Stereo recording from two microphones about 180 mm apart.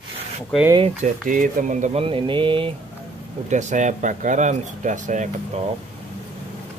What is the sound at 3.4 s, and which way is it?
Speech, 40° right (ahead or behind).